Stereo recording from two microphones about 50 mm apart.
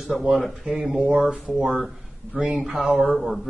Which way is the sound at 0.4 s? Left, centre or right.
Centre.